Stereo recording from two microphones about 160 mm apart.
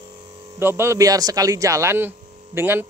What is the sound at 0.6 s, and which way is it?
Speech, 15° right (ahead or behind).